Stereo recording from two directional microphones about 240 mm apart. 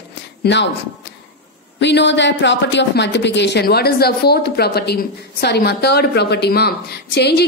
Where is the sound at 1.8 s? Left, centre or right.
Left.